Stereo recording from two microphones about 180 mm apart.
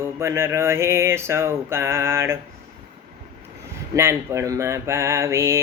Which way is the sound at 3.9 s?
15° right (ahead or behind).